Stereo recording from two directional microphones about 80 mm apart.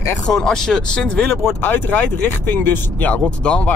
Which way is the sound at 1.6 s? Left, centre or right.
Left.